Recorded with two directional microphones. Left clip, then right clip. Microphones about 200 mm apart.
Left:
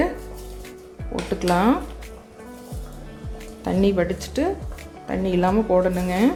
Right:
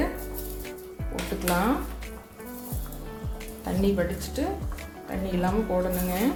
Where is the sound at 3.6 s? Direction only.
55° left (ahead or behind).